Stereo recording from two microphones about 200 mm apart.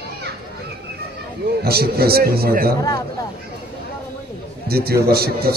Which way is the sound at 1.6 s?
50° right (ahead or behind).